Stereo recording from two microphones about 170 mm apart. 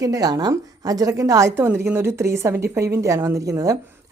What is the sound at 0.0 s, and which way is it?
A woman's voice, 20° right (ahead or behind).